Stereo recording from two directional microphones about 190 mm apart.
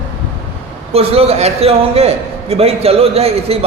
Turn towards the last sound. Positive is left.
turn(degrees=-30)  # may be behind; listen again after turning